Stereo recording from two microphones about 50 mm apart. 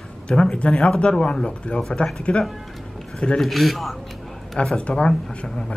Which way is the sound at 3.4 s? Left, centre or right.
Centre.